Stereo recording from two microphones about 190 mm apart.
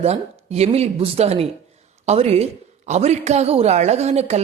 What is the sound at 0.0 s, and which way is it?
A woman's voice, 35° right (ahead or behind).